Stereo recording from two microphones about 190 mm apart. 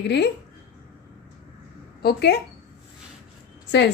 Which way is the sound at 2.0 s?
60° left (ahead or behind).